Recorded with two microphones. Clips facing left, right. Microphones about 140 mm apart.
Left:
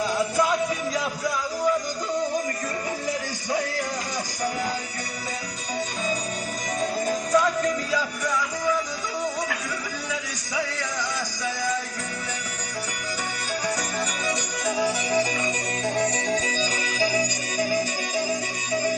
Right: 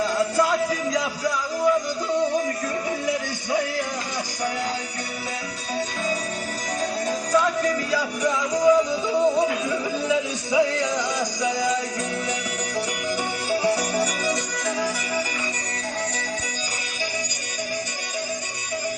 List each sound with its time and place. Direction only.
0.0 s a sound: centre (ahead or behind)
7.1 s music: centre (ahead or behind)
8.2 s music: 20° right (ahead or behind)